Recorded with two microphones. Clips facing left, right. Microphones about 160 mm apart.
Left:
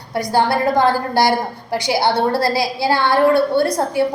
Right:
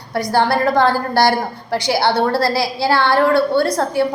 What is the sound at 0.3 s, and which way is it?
A woman's voice, 20° left (ahead or behind).